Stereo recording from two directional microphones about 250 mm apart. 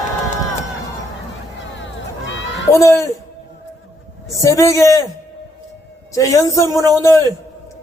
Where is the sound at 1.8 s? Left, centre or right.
Left.